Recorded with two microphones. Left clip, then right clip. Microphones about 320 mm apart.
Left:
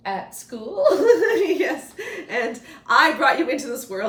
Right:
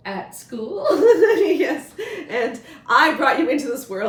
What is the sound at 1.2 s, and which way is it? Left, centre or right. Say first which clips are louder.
A woman's voice: right 3 dB; centre.